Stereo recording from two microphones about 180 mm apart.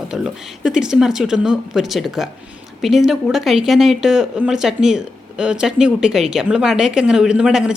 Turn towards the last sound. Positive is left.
turn(degrees=-5)  # may be behind; listen again after turning